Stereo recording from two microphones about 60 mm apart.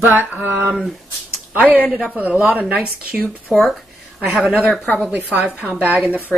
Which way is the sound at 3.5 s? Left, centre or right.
Centre.